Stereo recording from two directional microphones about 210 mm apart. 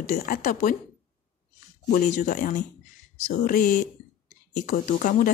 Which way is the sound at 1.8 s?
40° left (ahead or behind).